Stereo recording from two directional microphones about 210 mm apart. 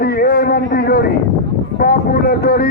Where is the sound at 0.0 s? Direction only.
50° left (ahead or behind).